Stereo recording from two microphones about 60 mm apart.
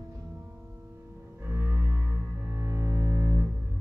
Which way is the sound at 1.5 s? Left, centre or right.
Right.